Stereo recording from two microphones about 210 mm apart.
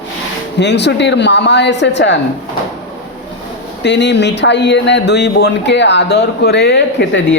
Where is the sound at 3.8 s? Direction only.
55° left (ahead or behind).